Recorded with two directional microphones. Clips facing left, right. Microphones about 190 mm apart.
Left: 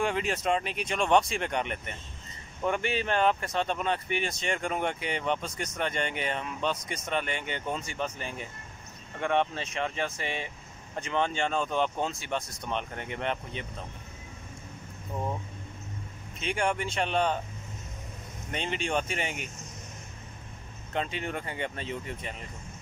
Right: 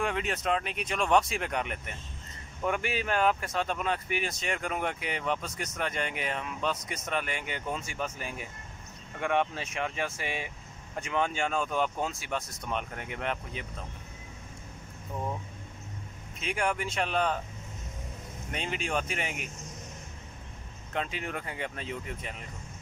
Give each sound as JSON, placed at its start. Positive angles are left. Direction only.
{"t": 0.0, "sound": "speech", "side_deg": 0}
{"t": 16.3, "sound": "speech", "side_deg": -5}
{"t": 18.5, "sound": "speech", "side_deg": 0}
{"t": 20.9, "sound": "speech", "side_deg": 0}